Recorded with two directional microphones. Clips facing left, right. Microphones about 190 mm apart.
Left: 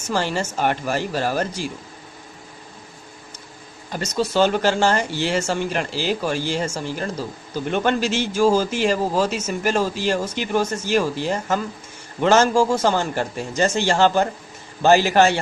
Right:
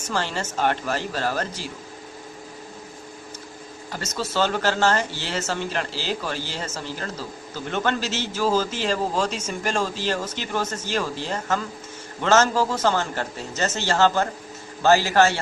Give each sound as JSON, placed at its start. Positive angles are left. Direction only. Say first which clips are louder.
{"t": 0.1, "sound": "speech", "louder": "left 4 dB", "side_deg": 10}
{"t": 3.9, "sound": "speech", "louder": "left 6 dB", "side_deg": 15}